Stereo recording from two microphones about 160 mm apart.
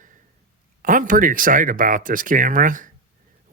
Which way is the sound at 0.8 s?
55° right (ahead or behind).